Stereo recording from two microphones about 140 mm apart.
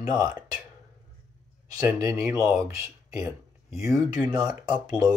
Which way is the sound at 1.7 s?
25° right (ahead or behind).